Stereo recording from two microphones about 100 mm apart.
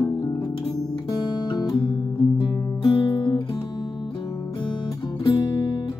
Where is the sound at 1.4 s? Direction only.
45° left (ahead or behind).